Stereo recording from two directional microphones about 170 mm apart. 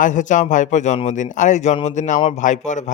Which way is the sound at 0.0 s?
45° left (ahead or behind).